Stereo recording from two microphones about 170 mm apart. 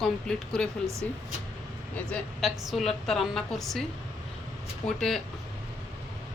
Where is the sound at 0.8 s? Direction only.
15° right (ahead or behind).